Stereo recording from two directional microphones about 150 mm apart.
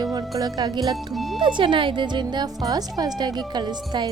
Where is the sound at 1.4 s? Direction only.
35° right (ahead or behind).